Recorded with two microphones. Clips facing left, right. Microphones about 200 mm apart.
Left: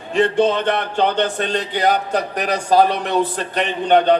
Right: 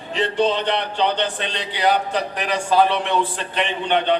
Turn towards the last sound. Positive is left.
turn(degrees=40)  # may be behind; listen again after turning